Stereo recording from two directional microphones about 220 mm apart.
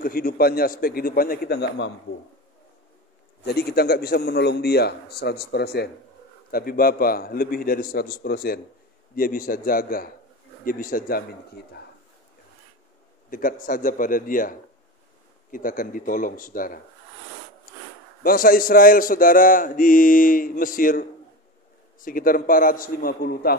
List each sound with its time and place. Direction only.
0.0 s a man's voice: 40° left (ahead or behind)
3.4 s a man's voice: 45° left (ahead or behind)
13.3 s speech: 40° left (ahead or behind)
18.2 s speech: 40° left (ahead or behind)